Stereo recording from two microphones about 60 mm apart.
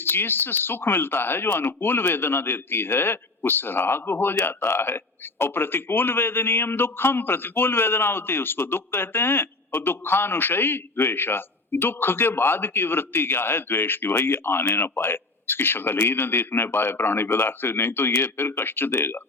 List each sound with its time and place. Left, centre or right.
0.0 s speech: left